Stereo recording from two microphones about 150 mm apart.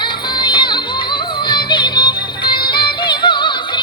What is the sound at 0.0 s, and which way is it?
Music, 30° left (ahead or behind).